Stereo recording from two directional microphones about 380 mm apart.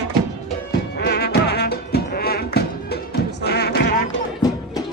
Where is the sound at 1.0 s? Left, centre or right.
Left.